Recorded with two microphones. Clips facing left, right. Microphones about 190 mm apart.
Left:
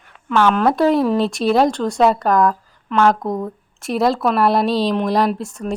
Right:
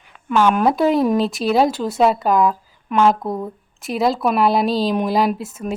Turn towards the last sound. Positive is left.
turn(degrees=-5)  # may be behind; listen again after turning